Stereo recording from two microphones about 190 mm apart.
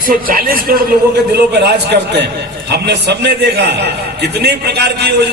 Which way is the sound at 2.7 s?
60° right (ahead or behind).